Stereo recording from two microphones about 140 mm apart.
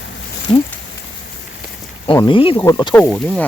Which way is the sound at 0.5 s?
40° left (ahead or behind).